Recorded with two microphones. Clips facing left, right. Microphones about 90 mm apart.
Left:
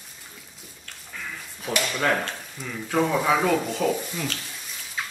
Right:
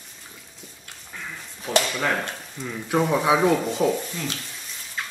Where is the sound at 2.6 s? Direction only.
15° right (ahead or behind).